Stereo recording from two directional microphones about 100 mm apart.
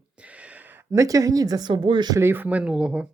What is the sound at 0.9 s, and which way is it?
Speech, 35° right (ahead or behind).